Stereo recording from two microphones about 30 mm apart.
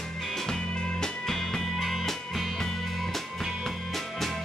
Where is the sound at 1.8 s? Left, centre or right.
Centre.